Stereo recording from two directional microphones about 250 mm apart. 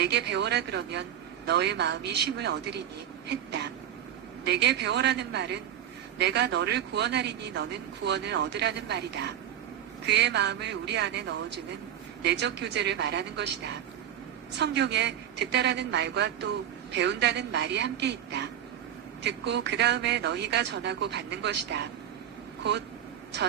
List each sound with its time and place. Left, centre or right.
0.0 s a man's voice: right